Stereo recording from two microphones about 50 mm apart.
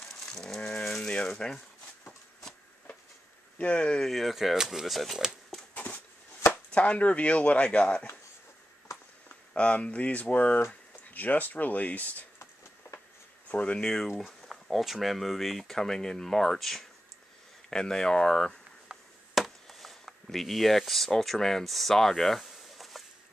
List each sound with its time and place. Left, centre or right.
0.8 s rattle: centre
1.4 s speech: centre
3.5 s speech: left
4.0 s speech: centre
6.7 s speech: left
9.5 s speech: left
13.5 s speech: left
13.8 s speech: centre
17.6 s speech: centre
18.9 s chop: centre
19.3 s a sound: centre